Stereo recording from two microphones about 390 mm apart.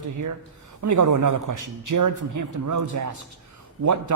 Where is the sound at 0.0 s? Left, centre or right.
Right.